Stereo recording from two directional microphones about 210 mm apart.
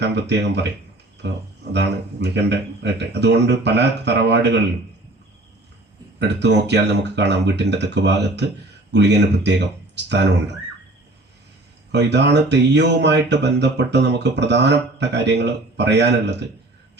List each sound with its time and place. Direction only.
0.0 s speech: 55° right (ahead or behind)
6.1 s speech: 55° right (ahead or behind)
11.9 s speech: 55° right (ahead or behind)